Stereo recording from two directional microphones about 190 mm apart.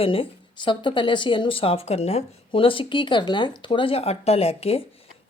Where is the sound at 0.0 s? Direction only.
30° left (ahead or behind).